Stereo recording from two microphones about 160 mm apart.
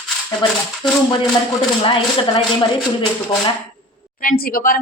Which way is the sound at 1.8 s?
30° left (ahead or behind).